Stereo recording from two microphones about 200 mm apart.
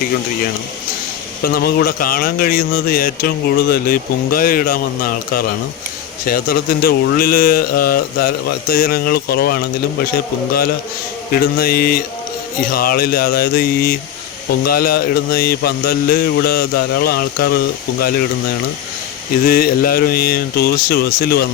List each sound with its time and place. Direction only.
1.5 s speech: 50° left (ahead or behind)
11.3 s speech: 50° left (ahead or behind)
19.5 s speech: 50° left (ahead or behind)